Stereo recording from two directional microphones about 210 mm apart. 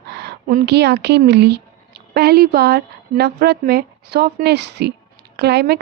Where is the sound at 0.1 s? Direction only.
50° right (ahead or behind).